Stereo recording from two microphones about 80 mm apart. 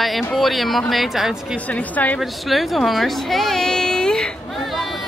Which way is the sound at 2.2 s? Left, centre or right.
Centre.